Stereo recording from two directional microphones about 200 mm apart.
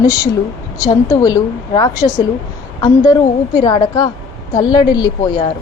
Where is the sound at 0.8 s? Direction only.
20° left (ahead or behind).